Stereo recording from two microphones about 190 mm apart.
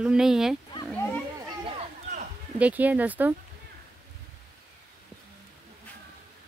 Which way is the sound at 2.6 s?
10° right (ahead or behind).